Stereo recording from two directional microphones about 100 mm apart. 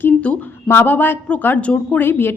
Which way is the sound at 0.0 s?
15° left (ahead or behind).